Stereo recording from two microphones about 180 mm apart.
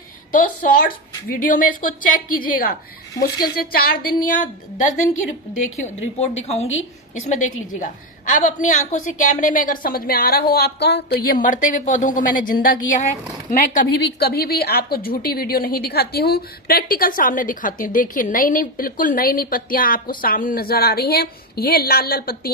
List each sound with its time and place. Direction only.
0.3 s a woman's voice: 50° left (ahead or behind)
4.8 s a woman's voice: 45° left (ahead or behind)
11.4 s a woman's voice: 45° left (ahead or behind)